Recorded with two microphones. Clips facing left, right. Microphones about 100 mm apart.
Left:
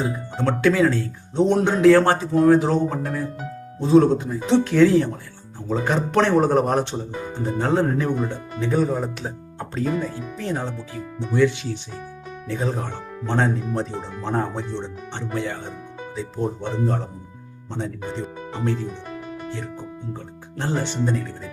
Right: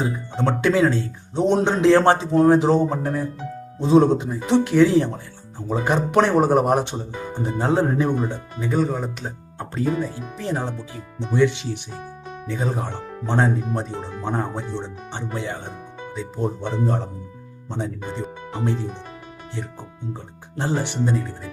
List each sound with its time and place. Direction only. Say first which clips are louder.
0.3 s speech: even; 20° right (ahead or behind)
8.7 s speech: even; centre (ahead or behind)
10.2 s speech: even; 15° right (ahead or behind)
12.5 s speech: even; centre (ahead or behind)
12.8 s speech: right 1 dB; 15° right (ahead or behind)
14.3 s speech: left 1 dB; 5° right (ahead or behind)
17.7 s speech: even; 5° right (ahead or behind)
18.6 s speech: even; 20° right (ahead or behind)
20.6 s speech: right 1 dB; 15° right (ahead or behind)